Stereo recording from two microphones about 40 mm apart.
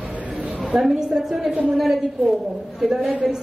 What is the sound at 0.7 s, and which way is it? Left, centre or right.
Speech, centre.